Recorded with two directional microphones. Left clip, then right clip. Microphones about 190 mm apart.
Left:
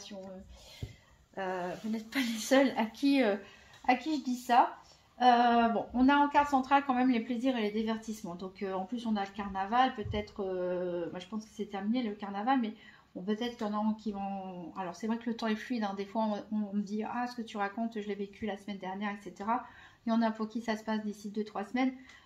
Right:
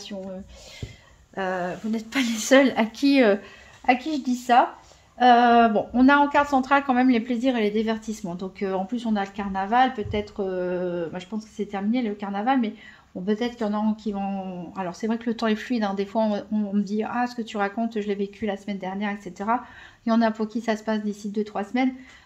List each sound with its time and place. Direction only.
1.3 s a woman's voice: 30° right (ahead or behind)